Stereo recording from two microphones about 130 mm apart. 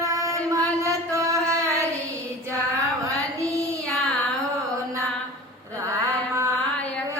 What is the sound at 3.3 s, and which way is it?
Child singing, 25° right (ahead or behind).